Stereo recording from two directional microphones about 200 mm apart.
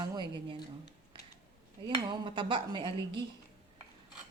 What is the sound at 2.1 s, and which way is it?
Speech, 25° right (ahead or behind).